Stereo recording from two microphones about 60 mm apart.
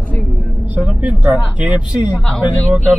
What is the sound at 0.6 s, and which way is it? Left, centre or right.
Speech, right.